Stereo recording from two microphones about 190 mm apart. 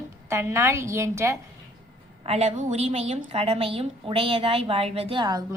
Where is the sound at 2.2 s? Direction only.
35° right (ahead or behind).